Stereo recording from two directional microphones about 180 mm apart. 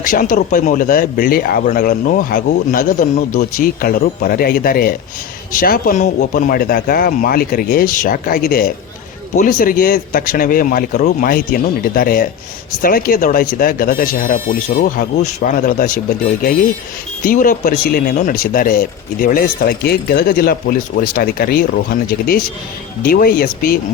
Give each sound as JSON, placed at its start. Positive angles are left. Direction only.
{"t": 0.0, "sound": "speech", "side_deg": 50}
{"t": 9.3, "sound": "speech", "side_deg": 45}